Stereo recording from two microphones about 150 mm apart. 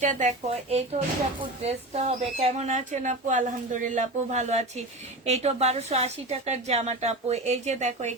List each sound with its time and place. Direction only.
0.0 s speech: 55° right (ahead or behind)